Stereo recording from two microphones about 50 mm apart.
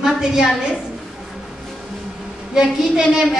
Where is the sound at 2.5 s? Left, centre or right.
Centre.